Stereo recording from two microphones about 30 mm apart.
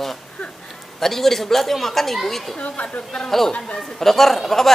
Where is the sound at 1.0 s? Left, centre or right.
Centre.